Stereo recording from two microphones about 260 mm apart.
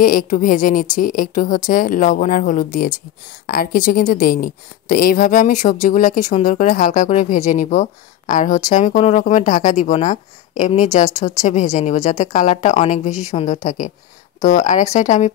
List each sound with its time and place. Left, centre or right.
0.0 s a woman's voice: left